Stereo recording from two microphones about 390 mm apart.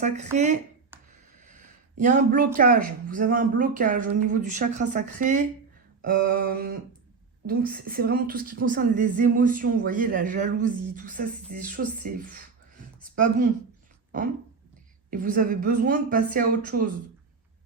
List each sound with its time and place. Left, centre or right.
0.0 s speech: centre
13.0 s a sound: centre
15.1 s speech: right